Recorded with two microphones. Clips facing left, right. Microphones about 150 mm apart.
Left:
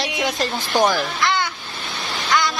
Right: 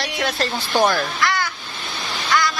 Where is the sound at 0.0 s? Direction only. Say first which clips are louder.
Left 1 dB; 20° left (ahead or behind).